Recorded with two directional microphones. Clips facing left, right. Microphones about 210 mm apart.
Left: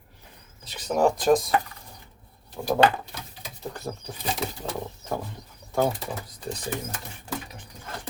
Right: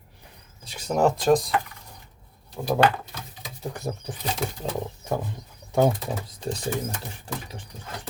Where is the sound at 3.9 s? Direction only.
15° right (ahead or behind).